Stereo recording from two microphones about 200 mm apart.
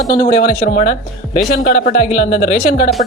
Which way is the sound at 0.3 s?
35° left (ahead or behind).